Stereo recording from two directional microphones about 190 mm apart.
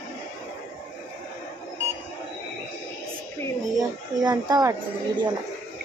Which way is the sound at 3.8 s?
20° right (ahead or behind).